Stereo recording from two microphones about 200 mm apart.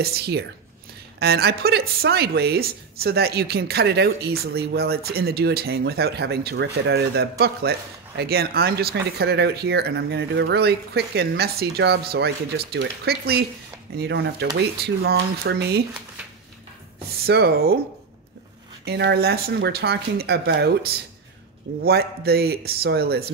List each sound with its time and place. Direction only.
0.0 s a woman's voice: 50° right (ahead or behind)
17.2 s a woman's voice: 55° right (ahead or behind)
18.9 s a woman's voice: 55° right (ahead or behind)